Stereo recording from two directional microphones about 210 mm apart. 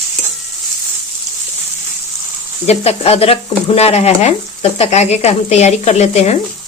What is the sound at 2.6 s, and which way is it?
Speech, 30° left (ahead or behind).